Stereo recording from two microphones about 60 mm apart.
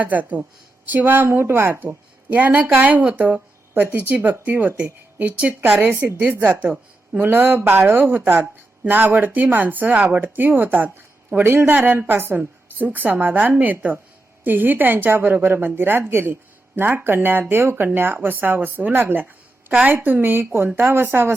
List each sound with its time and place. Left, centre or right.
0.0 s a woman's voice: right
2.3 s a woman's voice: right
5.8 s a woman's voice: right
7.2 s a woman's voice: right
11.4 s a woman's voice: right
19.2 s a sound: right
19.9 s a woman's voice: right